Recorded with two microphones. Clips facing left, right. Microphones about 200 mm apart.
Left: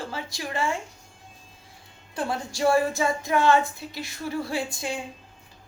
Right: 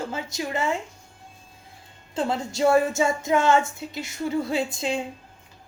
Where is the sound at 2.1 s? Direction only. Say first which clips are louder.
Right 3 dB; 25° right (ahead or behind).